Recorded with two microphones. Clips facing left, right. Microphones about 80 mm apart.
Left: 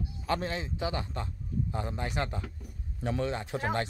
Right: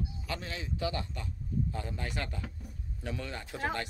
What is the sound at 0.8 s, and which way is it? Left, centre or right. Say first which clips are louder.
Speech: right 1 dB; left.